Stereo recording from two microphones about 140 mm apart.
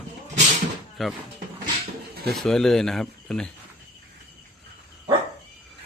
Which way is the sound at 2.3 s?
5° left (ahead or behind).